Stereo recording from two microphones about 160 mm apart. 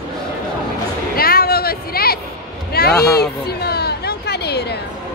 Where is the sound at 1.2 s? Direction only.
70° left (ahead or behind).